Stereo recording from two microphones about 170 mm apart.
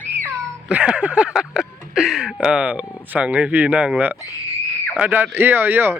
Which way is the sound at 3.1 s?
10° right (ahead or behind).